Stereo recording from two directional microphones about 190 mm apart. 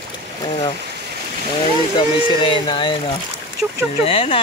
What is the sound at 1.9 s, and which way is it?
Speech, 25° left (ahead or behind).